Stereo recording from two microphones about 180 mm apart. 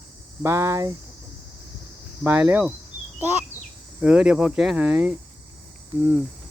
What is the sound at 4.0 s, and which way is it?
Speech, 5° right (ahead or behind).